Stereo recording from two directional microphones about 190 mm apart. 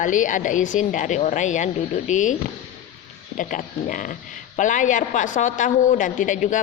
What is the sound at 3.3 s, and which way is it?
Speech, 45° left (ahead or behind).